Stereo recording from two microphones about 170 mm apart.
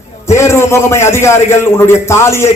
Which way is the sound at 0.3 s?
15° left (ahead or behind).